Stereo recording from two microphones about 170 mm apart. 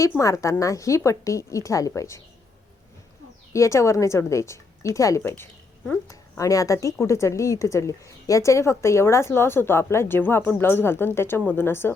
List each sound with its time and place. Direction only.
0.2 s a woman's voice: 20° left (ahead or behind)
3.5 s a woman's voice: 15° left (ahead or behind)
5.3 s a woman's voice: 5° left (ahead or behind)